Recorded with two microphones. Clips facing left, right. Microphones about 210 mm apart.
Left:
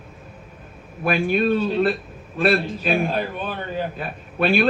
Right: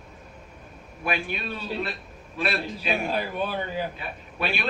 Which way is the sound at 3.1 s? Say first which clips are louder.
Left 2 dB; 10° right (ahead or behind).